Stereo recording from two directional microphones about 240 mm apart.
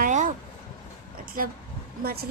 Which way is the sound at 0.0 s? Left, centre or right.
Right.